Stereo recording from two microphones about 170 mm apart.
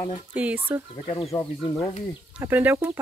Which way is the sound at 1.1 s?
35° left (ahead or behind).